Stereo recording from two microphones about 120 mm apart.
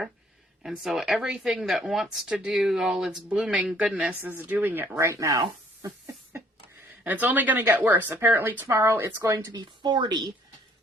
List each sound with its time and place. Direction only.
0.6 s speech: 5° right (ahead or behind); by 5.4 s 25° right (ahead or behind)
5.4 s a sound: 25° right (ahead or behind)
7.0 s a woman's voice: 15° right (ahead or behind); by 10.3 s 35° right (ahead or behind)